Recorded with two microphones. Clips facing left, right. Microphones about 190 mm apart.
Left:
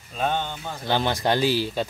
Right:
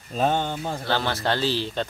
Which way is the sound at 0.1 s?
40° right (ahead or behind).